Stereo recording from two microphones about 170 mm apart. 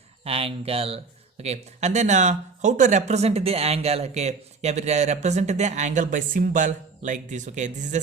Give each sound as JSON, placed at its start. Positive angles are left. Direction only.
{"t": 0.3, "sound": "speech", "side_deg": -35}